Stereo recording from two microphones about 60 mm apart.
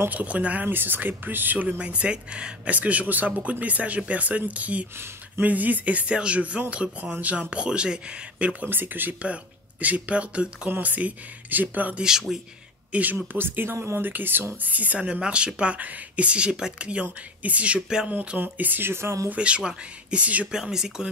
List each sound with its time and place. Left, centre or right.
0.1 s speech: right
1.8 s speech: centre
12.0 s speech: centre
12.9 s speech: right
18.4 s speech: right
19.3 s speech: centre
20.5 s speech: centre